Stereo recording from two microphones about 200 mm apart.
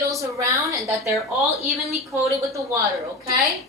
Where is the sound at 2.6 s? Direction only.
15° right (ahead or behind).